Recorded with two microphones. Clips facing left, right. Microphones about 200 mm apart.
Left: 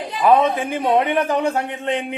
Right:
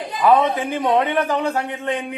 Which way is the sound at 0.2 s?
25° left (ahead or behind).